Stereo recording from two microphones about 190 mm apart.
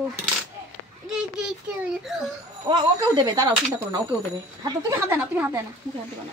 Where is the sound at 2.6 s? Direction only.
25° right (ahead or behind).